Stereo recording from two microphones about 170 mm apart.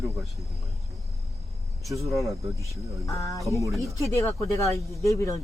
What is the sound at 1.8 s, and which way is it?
Speech, 20° right (ahead or behind).